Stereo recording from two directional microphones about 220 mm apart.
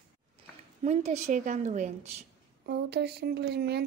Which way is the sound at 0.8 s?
30° right (ahead or behind).